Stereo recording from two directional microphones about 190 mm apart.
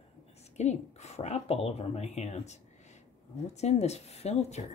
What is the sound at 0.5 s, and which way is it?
Speech, 35° left (ahead or behind).